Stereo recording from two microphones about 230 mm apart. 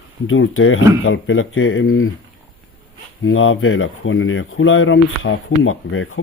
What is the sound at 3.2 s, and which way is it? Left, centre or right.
Speech, left.